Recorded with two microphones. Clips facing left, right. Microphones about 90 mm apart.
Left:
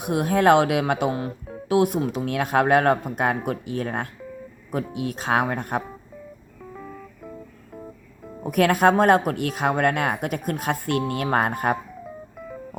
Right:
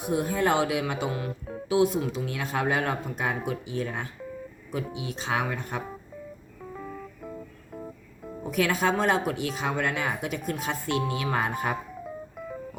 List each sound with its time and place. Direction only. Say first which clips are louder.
0.0 s speech: left 6 dB; 65° left (ahead or behind)
1.3 s music: even; centre (ahead or behind)
1.6 s speech: left 3 dB; 60° left (ahead or behind)
6.7 s music: right 1 dB; centre (ahead or behind)
8.4 s speech: left 7 dB; 55° left (ahead or behind)